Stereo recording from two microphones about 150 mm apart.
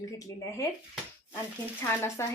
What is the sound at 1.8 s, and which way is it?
Speech, 15° left (ahead or behind).